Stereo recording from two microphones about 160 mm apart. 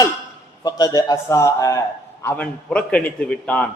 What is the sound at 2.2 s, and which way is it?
A man's voice, 10° left (ahead or behind).